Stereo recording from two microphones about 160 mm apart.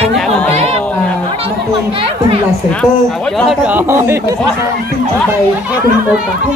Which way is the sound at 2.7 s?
5° left (ahead or behind).